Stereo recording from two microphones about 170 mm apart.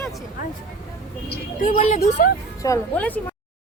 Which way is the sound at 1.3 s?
50° left (ahead or behind).